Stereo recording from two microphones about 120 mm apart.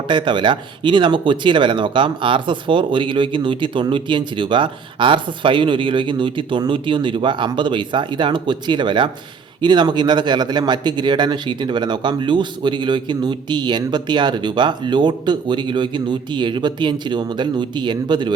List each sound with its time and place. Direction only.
0.1 s speech: 40° right (ahead or behind)